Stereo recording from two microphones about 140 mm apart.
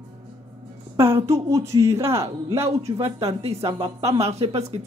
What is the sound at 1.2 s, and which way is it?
A man's voice, 20° right (ahead or behind).